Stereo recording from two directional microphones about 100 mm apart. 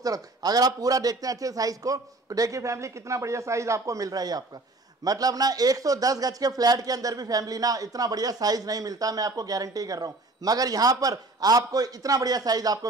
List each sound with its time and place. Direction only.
0.0 s speech: 40° right (ahead or behind)